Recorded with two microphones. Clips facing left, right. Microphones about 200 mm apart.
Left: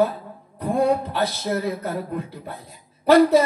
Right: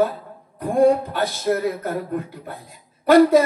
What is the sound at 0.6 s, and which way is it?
Speech, 50° right (ahead or behind).